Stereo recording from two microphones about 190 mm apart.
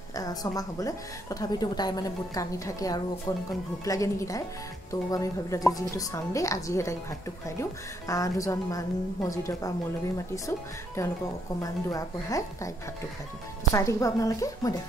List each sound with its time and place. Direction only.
0.1 s a woman's voice: 20° left (ahead or behind)
11.0 s a woman's voice: 15° left (ahead or behind)
13.7 s a woman's voice: 15° left (ahead or behind)